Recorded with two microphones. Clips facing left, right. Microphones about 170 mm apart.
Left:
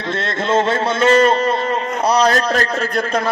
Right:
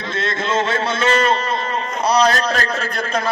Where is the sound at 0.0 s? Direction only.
60° left (ahead or behind).